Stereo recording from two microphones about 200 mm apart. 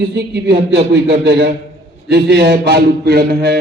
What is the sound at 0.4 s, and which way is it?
A man's voice, 55° right (ahead or behind).